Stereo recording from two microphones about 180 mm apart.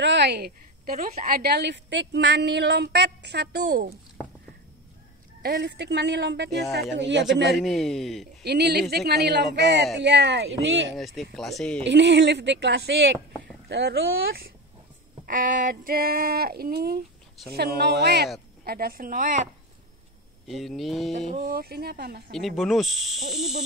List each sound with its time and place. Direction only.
0.0 s a woman's voice: 75° right (ahead or behind)
5.4 s a woman's voice: 60° right (ahead or behind)
6.5 s speech: centre (ahead or behind)
7.0 s a woman's voice: 80° right
7.6 s speech: centre (ahead or behind)
8.5 s a woman's voice: 65° right (ahead or behind); by 11.0 s 85° right
11.0 s speech: centre (ahead or behind)
11.8 s a woman's voice: 80° right
15.2 s a sound: 50° right (ahead or behind)
17.5 s speech: 65° right (ahead or behind)
18.6 s a sound: 55° right (ahead or behind)
20.4 s speech: centre (ahead or behind)
21.3 s speech: 50° right (ahead or behind)
22.3 s speech: centre (ahead or behind)